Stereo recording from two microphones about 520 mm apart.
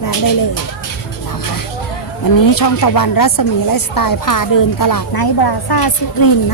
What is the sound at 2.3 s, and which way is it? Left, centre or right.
Speech, left.